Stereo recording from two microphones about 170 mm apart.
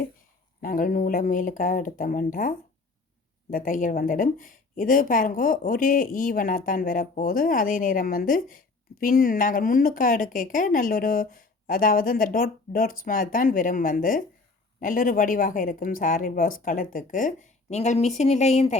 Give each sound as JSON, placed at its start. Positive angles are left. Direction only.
{"t": 0.6, "sound": "speech", "side_deg": 55}